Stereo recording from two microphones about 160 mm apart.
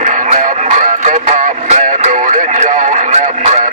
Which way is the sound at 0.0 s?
50° right (ahead or behind).